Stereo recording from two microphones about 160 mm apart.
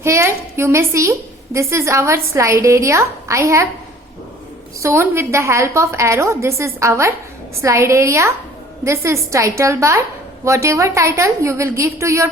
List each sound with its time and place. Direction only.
0.0 s a woman's voice: 15° right (ahead or behind)
4.8 s a woman's voice: 15° right (ahead or behind)